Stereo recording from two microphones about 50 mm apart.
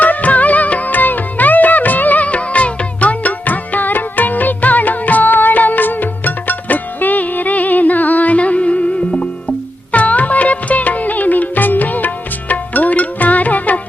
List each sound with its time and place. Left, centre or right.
0.0 s music: left
9.9 s music: left